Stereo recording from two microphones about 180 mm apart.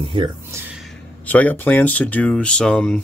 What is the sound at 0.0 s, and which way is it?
Speech, 30° right (ahead or behind).